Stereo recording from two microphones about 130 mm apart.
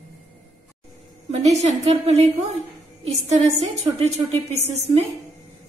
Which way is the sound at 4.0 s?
55° right (ahead or behind).